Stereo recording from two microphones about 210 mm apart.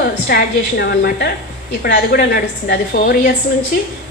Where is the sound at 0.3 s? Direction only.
45° left (ahead or behind).